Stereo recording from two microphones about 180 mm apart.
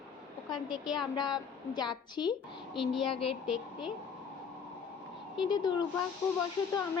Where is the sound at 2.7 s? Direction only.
Centre (ahead or behind).